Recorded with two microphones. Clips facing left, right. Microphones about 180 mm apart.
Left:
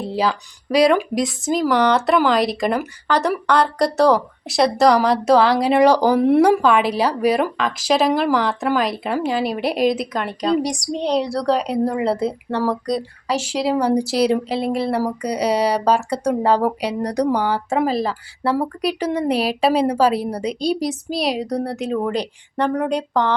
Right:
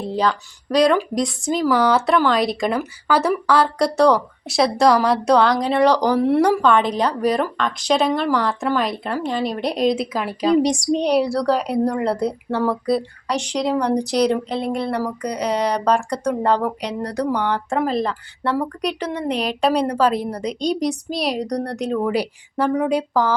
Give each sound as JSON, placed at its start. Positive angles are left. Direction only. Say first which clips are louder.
{"t": 0.1, "sound": "speech", "louder": "right 1 dB", "side_deg": 5}
{"t": 6.6, "sound": "speech", "louder": "even", "side_deg": 5}
{"t": 10.6, "sound": "a sound", "louder": "right 4 dB", "side_deg": -25}
{"t": 11.2, "sound": "speech", "louder": "right 1 dB", "side_deg": 0}